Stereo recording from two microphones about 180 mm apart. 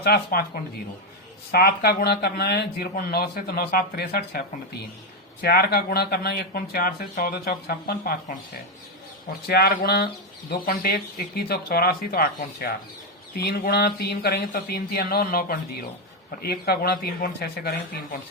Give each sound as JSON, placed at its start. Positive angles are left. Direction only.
{"t": 0.0, "sound": "speech", "side_deg": 60}
{"t": 1.5, "sound": "speech", "side_deg": 60}